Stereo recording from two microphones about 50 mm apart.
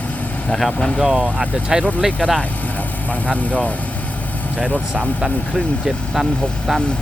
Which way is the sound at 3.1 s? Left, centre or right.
Left.